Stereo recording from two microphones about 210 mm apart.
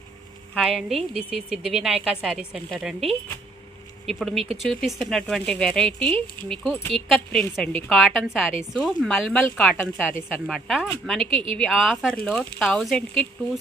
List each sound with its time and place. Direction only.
0.6 s a woman's voice: centre (ahead or behind)
11.2 s speech: 25° right (ahead or behind)
11.5 s a woman's voice: centre (ahead or behind)